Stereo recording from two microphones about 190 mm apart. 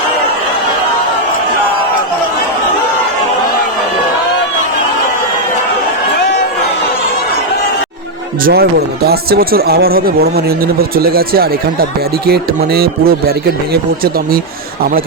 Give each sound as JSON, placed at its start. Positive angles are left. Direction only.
{"t": 8.4, "sound": "speech", "side_deg": -55}